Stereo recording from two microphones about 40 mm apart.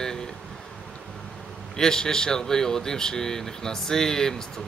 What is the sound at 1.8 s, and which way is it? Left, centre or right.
Speech, centre.